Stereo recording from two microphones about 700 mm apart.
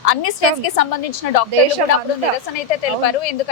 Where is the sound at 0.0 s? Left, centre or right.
Left.